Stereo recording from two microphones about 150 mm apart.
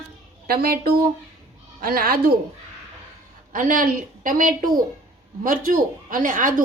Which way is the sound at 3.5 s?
65° right (ahead or behind).